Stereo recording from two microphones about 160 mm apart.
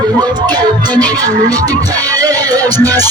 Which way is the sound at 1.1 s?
20° right (ahead or behind).